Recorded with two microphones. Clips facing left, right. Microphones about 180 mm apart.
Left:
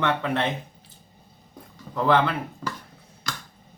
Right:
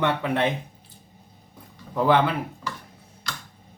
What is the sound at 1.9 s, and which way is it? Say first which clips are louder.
Speech: right 1 dB; 10° right (ahead or behind).